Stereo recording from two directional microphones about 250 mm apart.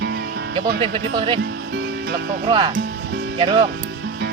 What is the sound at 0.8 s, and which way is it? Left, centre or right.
Speech, centre.